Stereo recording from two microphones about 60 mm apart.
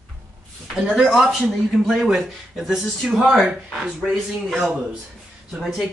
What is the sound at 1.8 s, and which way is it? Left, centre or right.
Speech, centre.